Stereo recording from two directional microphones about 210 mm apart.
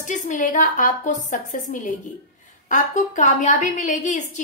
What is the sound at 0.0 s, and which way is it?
A woman's voice, 35° left (ahead or behind).